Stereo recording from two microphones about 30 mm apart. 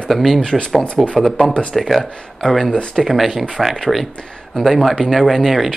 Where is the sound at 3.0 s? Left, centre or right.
Centre.